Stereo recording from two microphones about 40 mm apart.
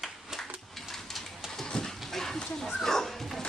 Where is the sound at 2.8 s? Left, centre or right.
Centre.